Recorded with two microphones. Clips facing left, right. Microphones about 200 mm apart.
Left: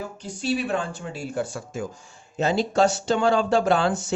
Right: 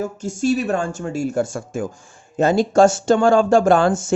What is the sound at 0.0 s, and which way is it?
Speech, 45° right (ahead or behind).